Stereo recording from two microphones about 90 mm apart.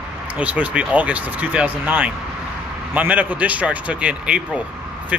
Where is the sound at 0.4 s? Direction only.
15° right (ahead or behind).